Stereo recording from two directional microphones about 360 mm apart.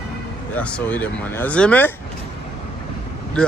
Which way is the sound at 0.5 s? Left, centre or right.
Centre.